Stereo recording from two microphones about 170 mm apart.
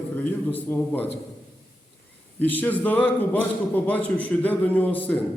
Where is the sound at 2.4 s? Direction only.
10° left (ahead or behind).